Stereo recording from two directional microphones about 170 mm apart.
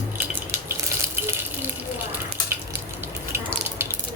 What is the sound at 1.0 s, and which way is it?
Water, 15° right (ahead or behind).